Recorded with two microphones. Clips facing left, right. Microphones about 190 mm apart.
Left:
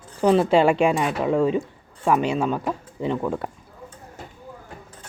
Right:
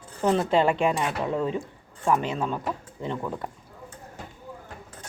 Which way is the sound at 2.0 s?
80° left.